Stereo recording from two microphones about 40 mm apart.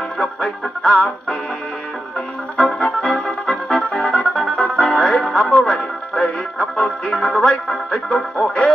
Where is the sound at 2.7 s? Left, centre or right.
Left.